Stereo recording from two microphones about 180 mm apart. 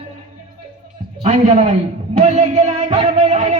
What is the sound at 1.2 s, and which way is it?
Speech, 40° right (ahead or behind).